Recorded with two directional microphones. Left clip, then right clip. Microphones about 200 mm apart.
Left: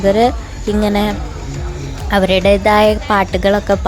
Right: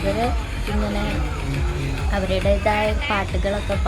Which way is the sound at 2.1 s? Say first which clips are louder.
Left 10 dB; 50° left (ahead or behind).